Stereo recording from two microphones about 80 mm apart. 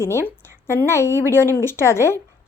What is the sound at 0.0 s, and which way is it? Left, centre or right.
A woman's voice, left.